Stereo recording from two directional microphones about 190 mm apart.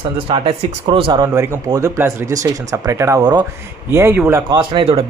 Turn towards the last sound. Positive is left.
turn(degrees=-30)  # may be behind; listen again after turning